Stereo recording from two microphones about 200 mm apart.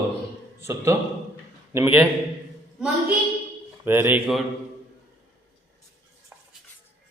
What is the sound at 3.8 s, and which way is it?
Speech, 10° right (ahead or behind).